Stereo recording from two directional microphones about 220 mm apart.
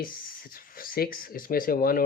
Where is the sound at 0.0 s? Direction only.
40° left (ahead or behind).